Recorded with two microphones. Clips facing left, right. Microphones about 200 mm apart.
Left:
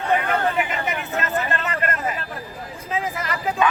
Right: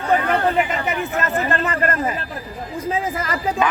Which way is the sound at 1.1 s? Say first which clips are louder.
Right 2 dB; 40° right (ahead or behind).